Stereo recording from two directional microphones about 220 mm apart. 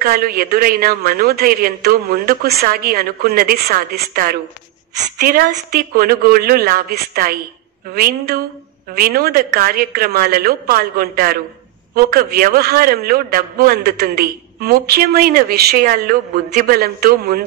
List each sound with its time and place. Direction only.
0.0 s a man's voice: 40° right (ahead or behind)